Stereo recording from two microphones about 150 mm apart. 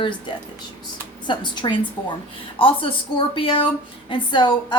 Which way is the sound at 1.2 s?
30° left (ahead or behind).